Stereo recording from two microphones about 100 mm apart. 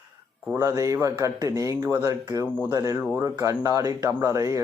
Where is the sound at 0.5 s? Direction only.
35° right (ahead or behind).